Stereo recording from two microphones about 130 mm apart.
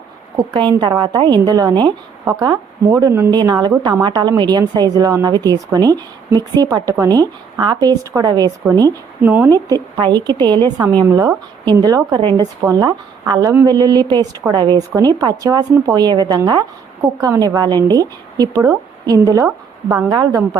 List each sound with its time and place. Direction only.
0.5 s a woman's voice: 35° right (ahead or behind)
9.2 s speech: 15° right (ahead or behind)
9.5 s a woman's voice: 30° right (ahead or behind)
20.1 s a woman's voice: 30° right (ahead or behind)